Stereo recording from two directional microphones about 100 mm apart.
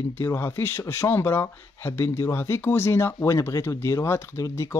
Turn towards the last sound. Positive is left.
turn(degrees=30)  # may be behind; listen again after turning